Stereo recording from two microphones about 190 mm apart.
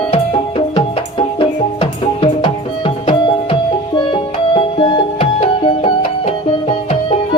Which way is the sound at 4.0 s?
25° left (ahead or behind).